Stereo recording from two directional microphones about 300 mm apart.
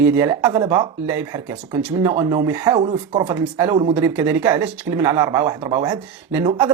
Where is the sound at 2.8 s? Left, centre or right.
Right.